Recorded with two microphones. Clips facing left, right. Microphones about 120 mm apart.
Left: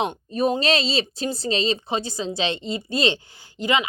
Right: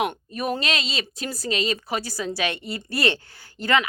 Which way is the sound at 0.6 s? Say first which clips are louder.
Left 6 dB; 30° left (ahead or behind).